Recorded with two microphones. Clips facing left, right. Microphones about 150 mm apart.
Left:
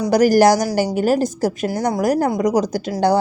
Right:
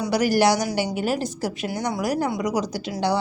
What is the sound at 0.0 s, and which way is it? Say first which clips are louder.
A woman's voice: left 7 dB; 45° left (ahead or behind).